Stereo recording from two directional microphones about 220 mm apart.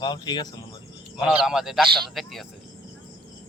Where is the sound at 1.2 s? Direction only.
Centre (ahead or behind).